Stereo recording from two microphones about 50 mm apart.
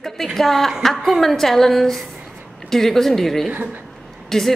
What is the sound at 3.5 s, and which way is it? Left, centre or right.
Speech, right.